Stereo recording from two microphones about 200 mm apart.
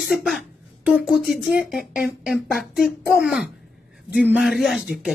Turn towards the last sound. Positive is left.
turn(degrees=0)  # may be behind; listen again after turning